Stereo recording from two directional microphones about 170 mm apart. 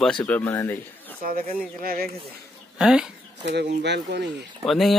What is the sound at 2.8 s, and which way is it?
Speech, 5° right (ahead or behind).